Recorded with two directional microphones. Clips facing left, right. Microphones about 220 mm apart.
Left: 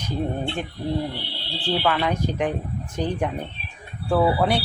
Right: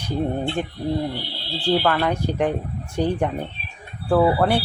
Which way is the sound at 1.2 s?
40° right (ahead or behind).